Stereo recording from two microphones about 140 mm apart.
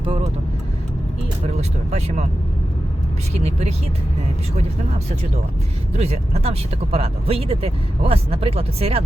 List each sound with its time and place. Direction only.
0.0 s vehicle: 40° right (ahead or behind)
1.5 s speech: 50° right (ahead or behind)
3.4 s speech: 50° right (ahead or behind)
6.0 s speech: 50° right (ahead or behind)